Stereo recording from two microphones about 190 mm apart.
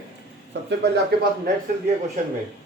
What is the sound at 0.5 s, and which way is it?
Speech, 65° right (ahead or behind).